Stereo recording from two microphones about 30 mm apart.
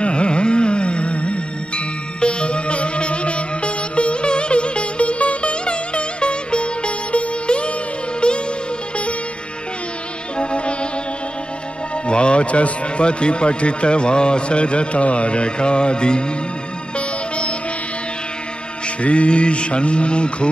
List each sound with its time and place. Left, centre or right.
0.0 s carnatic music: left
2.1 s music: left
10.3 s music: left
12.1 s speech: left
18.9 s speech: left